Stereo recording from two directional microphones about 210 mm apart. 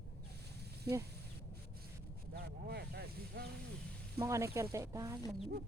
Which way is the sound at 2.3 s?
50° right (ahead or behind).